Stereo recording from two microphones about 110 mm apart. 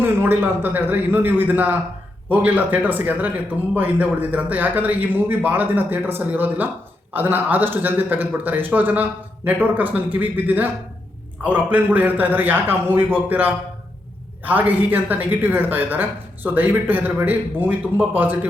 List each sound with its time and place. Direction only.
0.0 s speech: 20° right (ahead or behind)